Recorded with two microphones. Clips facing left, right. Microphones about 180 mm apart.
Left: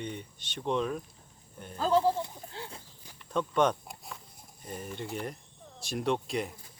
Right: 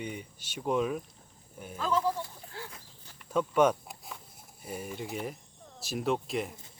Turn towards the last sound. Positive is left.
turn(degrees=0)  # may be behind; listen again after turning